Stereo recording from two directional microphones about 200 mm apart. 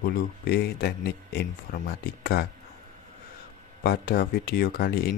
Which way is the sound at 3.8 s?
50° left (ahead or behind).